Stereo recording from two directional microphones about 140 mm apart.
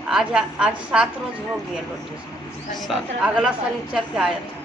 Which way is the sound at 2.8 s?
5° right (ahead or behind).